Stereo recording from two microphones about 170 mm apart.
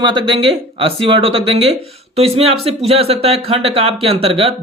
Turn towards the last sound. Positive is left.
turn(degrees=-35)  # may be behind; listen again after turning